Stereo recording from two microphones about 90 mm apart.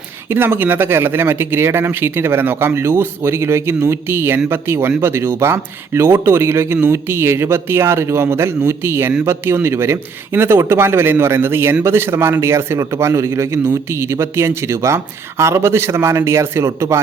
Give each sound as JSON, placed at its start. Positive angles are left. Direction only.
{"t": 0.3, "sound": "a man's voice", "side_deg": -25}